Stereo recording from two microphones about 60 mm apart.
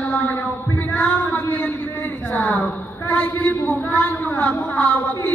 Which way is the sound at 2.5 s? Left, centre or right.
Left.